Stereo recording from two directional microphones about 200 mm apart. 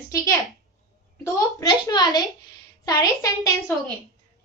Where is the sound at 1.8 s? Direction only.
20° left (ahead or behind).